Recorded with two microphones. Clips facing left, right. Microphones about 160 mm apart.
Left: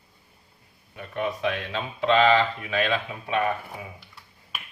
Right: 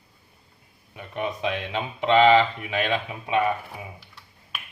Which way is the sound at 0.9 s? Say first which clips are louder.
Left 1 dB; 15° right (ahead or behind).